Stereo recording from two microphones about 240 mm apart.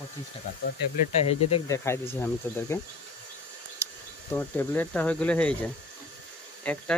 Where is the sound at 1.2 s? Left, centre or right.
Left.